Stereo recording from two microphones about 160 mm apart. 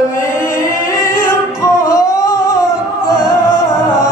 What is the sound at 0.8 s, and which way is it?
Music, 15° left (ahead or behind).